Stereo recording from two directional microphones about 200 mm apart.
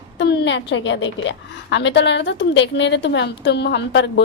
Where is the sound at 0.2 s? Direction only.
60° left (ahead or behind).